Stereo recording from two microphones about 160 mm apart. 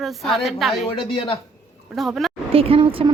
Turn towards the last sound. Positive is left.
turn(degrees=-35)  # may be behind; listen again after turning